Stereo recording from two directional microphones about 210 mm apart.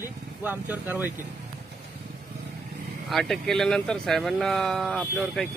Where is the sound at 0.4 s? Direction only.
10° right (ahead or behind).